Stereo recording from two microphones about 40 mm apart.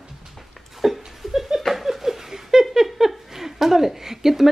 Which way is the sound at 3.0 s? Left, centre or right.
Centre.